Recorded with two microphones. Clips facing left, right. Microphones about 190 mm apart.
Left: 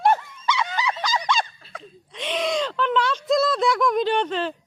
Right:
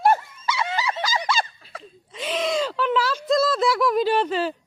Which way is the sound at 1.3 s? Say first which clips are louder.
Left 1 dB; 5° right (ahead or behind).